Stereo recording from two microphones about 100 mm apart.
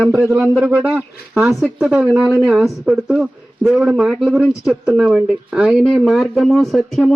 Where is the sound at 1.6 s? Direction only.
10° right (ahead or behind).